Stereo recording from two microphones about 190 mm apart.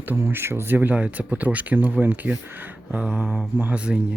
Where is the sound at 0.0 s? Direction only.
10° right (ahead or behind).